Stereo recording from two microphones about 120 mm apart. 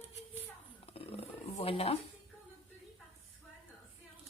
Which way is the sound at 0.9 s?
55° left (ahead or behind).